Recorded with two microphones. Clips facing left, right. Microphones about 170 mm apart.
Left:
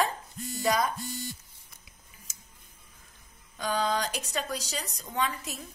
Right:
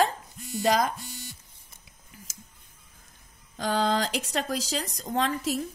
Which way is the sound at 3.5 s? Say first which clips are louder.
Right 3 dB; 90° right.